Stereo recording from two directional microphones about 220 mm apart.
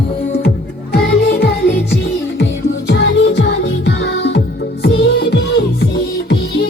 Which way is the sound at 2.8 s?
50° left (ahead or behind).